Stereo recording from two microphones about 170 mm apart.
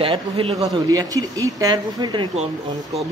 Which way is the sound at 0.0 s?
30° right (ahead or behind).